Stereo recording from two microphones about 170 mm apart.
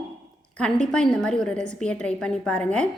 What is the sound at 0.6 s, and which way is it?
A woman's voice, 5° left (ahead or behind).